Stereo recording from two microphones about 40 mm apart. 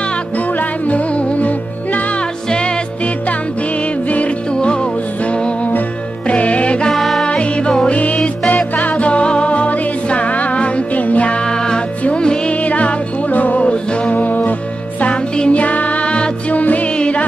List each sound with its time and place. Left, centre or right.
0.6 s music: left
6.2 s music: left
6.9 s music: centre
7.2 s music: left
8.7 s music: left
11.4 s music: centre
12.6 s music: left
14.1 s music: left
15.3 s music: left
15.6 s music: left
16.5 s music: left